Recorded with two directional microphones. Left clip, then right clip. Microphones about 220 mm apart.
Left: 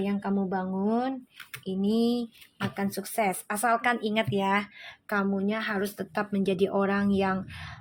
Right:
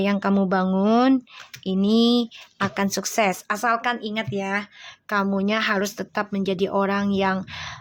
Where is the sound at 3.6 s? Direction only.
Centre (ahead or behind).